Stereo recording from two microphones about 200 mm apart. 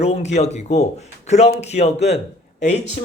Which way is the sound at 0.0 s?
35° left (ahead or behind).